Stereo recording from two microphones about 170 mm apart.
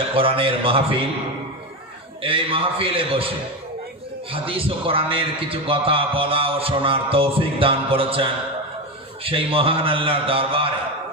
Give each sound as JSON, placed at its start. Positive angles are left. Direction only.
{"t": 0.2, "sound": "a man's voice", "side_deg": -30}
{"t": 2.2, "sound": "a man's voice", "side_deg": -30}